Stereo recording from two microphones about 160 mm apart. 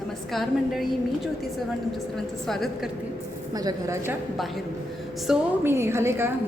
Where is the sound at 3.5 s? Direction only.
20° right (ahead or behind).